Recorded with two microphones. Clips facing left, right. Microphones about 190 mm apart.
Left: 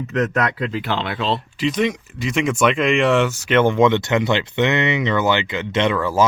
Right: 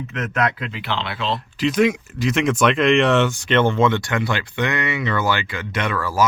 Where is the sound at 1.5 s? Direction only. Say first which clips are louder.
Right 5 dB; centre (ahead or behind).